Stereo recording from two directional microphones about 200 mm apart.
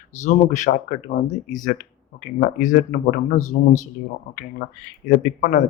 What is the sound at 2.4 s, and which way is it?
Speech, 40° left (ahead or behind).